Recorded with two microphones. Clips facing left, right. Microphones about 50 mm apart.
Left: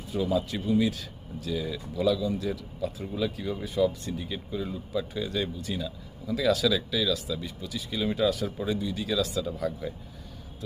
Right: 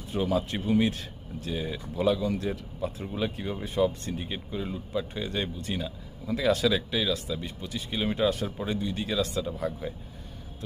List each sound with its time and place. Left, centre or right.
0.1 s speech: right
4.5 s speech: right
9.4 s speech: right